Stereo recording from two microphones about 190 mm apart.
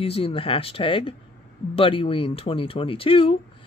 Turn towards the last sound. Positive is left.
turn(degrees=30)  # may be behind; listen again after turning